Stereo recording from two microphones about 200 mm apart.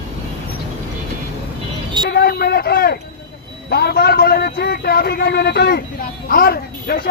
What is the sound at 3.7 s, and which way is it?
A man's voice, 55° left (ahead or behind).